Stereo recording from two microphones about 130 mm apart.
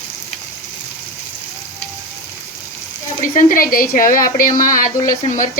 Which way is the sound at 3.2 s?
90° left.